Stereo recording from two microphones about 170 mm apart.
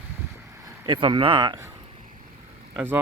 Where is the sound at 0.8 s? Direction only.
25° right (ahead or behind).